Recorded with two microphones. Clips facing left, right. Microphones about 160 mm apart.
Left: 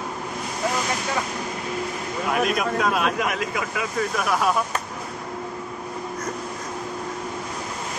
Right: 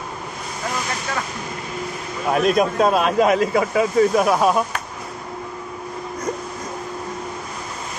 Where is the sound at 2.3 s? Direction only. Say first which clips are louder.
Right 6 dB; 30° right (ahead or behind).